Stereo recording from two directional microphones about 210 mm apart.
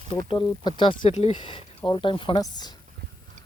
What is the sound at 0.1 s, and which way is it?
Speech, 25° left (ahead or behind).